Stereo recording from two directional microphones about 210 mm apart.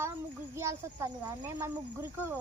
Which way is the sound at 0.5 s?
15° right (ahead or behind).